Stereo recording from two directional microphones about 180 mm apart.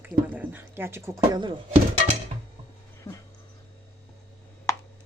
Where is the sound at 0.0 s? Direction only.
10° right (ahead or behind).